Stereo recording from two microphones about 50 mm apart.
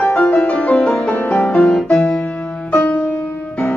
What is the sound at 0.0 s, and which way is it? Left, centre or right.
Music, left.